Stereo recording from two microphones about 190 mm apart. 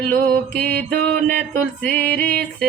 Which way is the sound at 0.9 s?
60° right (ahead or behind).